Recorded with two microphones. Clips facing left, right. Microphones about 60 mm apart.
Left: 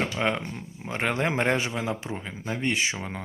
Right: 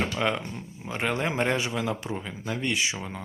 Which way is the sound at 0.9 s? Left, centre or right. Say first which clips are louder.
Left 1 dB; left.